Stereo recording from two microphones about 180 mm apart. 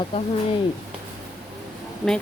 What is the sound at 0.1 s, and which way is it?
Speech, 30° left (ahead or behind).